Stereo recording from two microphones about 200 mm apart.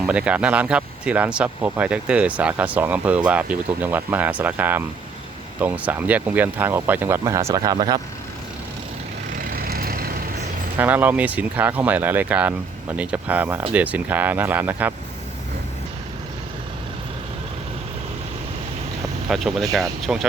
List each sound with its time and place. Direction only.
0.0 s speech: 5° right (ahead or behind)
9.4 s vehicle: 50° right (ahead or behind)
10.8 s speech: 10° right (ahead or behind)
19.3 s speech: centre (ahead or behind)